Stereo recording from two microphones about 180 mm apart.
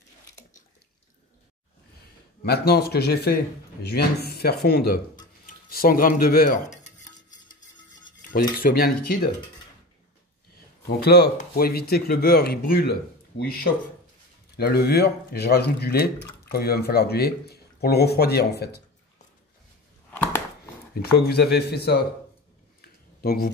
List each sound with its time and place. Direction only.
2.4 s speech: 65° left (ahead or behind)
8.7 s speech: 55° left (ahead or behind)
11.1 s speech: 60° left (ahead or behind)
14.6 s speech: 65° left (ahead or behind)
20.1 s a sound: 10° left (ahead or behind)
20.9 s speech: 65° left (ahead or behind)
22.8 s a sound: 55° left (ahead or behind)